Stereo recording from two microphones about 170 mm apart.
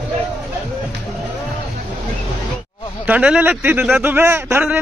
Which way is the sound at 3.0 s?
10° right (ahead or behind).